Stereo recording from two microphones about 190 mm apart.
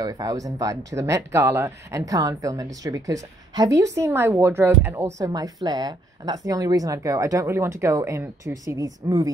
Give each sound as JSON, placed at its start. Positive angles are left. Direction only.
{"t": 0.0, "sound": "speech", "side_deg": -20}